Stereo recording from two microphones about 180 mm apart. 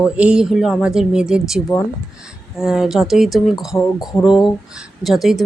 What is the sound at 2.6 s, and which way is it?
Speech, centre (ahead or behind).